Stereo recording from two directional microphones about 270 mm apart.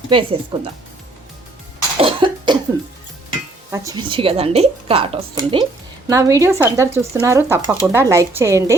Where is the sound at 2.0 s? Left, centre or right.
Centre.